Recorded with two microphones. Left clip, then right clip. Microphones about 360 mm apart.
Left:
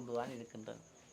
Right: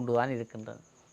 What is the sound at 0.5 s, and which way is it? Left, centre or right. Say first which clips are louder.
Speech: right 7 dB; right.